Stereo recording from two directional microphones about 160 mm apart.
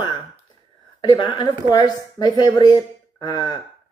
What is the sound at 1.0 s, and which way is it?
Speech, 30° left (ahead or behind).